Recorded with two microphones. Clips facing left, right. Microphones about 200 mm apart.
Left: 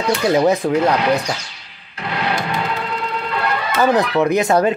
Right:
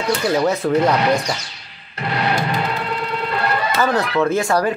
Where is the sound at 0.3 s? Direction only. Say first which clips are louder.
Left 4 dB; 15° left (ahead or behind).